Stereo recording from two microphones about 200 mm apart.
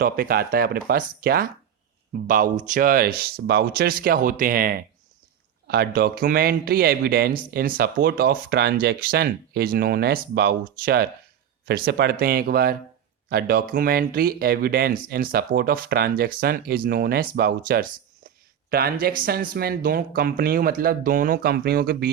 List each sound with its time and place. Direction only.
0.0 s speech: 50° right (ahead or behind)